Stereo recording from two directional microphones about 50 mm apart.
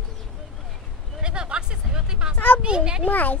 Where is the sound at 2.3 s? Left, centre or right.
Left.